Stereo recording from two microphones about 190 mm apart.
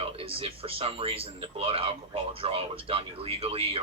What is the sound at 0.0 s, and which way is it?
Speech, 30° right (ahead or behind).